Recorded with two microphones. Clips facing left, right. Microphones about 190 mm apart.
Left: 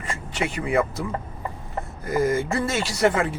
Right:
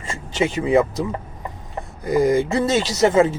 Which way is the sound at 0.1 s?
25° right (ahead or behind).